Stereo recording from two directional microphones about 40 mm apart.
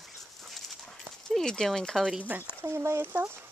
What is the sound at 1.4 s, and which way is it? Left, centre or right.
Speech, centre.